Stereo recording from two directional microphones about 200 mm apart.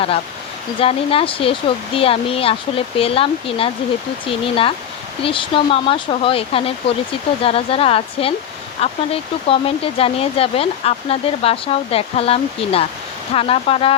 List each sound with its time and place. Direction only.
0.8 s speech: 30° left (ahead or behind)